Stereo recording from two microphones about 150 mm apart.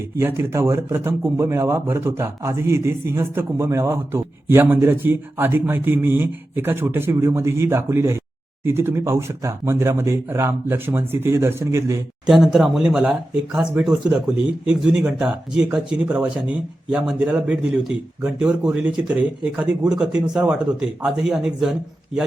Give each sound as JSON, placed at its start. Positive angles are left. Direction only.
{"t": 0.2, "sound": "speech", "side_deg": -15}
{"t": 12.2, "sound": "speech", "side_deg": -5}